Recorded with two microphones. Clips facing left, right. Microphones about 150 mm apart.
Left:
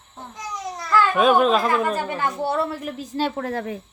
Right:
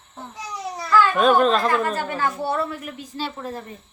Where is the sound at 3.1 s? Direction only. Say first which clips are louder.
Left 6 dB; 50° left (ahead or behind).